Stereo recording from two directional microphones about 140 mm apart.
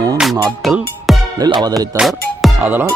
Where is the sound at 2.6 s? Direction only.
15° right (ahead or behind).